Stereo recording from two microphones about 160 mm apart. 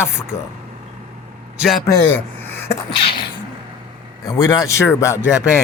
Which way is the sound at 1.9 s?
15° left (ahead or behind).